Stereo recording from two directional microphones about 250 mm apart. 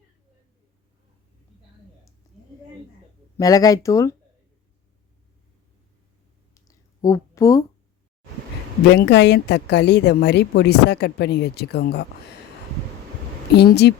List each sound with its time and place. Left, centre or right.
3.3 s speech: centre
6.5 s a sound: centre
8.9 s a woman's voice: left
13.5 s a woman's voice: left